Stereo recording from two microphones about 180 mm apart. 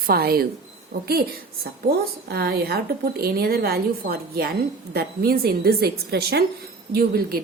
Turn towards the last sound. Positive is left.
turn(degrees=-55)  # may be behind; listen again after turning